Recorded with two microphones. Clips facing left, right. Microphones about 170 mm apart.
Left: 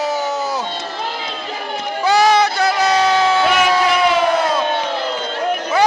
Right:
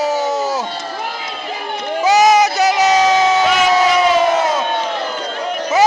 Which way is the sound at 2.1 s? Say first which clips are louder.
Right 2 dB; 10° right (ahead or behind).